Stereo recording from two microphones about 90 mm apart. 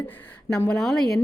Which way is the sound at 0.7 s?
5° left (ahead or behind).